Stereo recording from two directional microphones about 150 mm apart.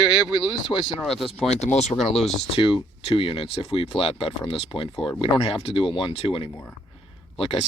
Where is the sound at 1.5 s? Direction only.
45° left (ahead or behind).